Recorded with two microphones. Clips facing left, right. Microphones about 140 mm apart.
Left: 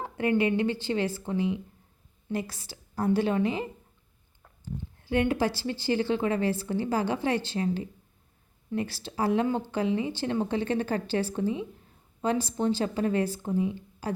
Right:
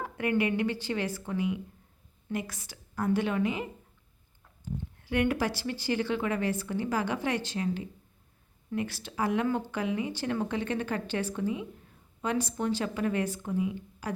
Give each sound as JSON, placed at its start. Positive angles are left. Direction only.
{"t": 0.0, "sound": "a woman's voice", "side_deg": 30}
{"t": 5.0, "sound": "a woman's voice", "side_deg": 30}